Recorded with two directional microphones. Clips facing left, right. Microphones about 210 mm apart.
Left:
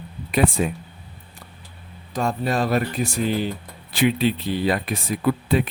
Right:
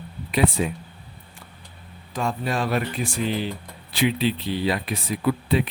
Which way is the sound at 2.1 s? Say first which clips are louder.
Left 3 dB; 40° left (ahead or behind).